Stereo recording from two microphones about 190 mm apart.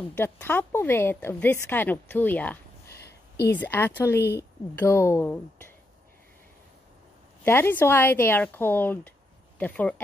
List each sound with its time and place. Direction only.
0.1 s a woman's voice: 10° left (ahead or behind)
3.0 s a sound: 60° left (ahead or behind)
3.5 s a woman's voice: 10° left (ahead or behind)
7.4 s a woman's voice: 10° left (ahead or behind)